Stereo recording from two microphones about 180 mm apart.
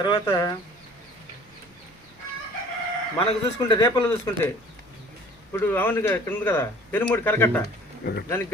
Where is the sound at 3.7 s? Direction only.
20° left (ahead or behind).